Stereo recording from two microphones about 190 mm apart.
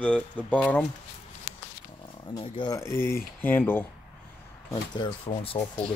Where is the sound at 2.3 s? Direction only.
20° left (ahead or behind).